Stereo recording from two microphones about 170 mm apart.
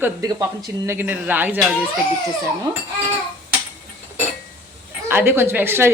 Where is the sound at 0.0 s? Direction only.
20° right (ahead or behind).